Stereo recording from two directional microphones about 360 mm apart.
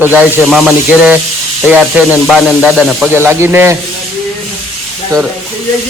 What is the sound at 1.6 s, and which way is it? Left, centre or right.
Speech, centre.